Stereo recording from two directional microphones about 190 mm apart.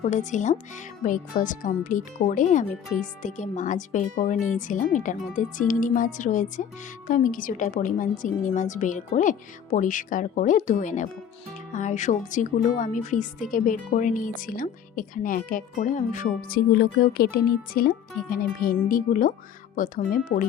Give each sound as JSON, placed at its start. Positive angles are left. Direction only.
{"t": 0.0, "sound": "speech", "side_deg": 40}